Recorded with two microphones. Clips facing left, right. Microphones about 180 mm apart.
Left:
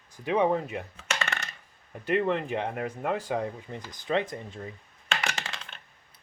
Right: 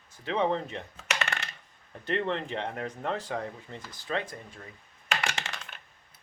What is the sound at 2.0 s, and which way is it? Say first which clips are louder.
Speech: left 4 dB; 10° left (ahead or behind).